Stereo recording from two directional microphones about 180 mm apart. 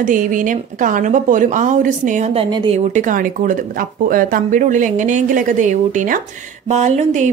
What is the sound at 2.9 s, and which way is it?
A woman's voice, 45° right (ahead or behind).